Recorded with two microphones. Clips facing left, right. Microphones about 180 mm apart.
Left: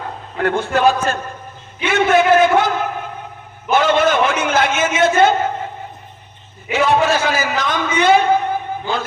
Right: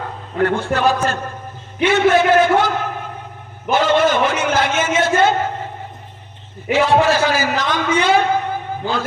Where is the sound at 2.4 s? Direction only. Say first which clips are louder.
Left 1 dB; 50° left (ahead or behind).